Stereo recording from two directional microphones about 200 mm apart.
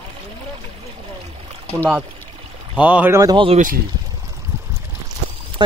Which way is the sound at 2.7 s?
5° right (ahead or behind).